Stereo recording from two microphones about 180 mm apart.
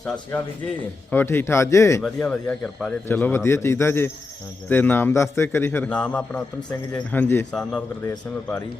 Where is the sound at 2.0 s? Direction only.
5° left (ahead or behind).